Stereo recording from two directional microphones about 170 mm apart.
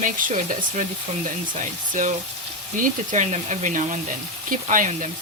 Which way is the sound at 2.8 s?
45° right (ahead or behind).